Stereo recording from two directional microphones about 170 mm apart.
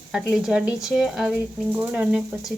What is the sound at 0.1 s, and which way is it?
Speech, 5° right (ahead or behind).